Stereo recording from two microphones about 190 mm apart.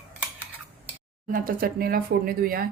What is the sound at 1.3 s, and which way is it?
Speech, 45° right (ahead or behind).